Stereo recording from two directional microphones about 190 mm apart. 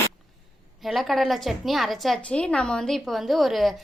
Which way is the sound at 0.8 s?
Centre (ahead or behind).